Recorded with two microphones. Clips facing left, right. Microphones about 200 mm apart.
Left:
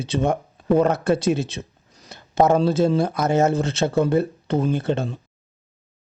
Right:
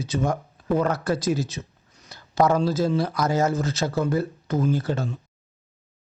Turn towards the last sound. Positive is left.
turn(degrees=25)  # may be behind; listen again after turning